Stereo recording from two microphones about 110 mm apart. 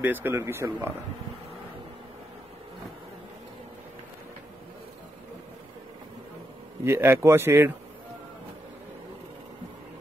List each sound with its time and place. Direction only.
0.0 s speech: 15° right (ahead or behind)
6.8 s speech: 20° right (ahead or behind)